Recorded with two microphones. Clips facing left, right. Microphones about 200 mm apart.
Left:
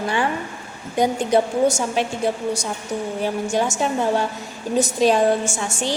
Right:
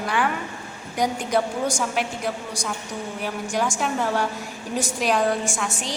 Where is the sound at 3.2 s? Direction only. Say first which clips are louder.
Left 3 dB; 25° left (ahead or behind).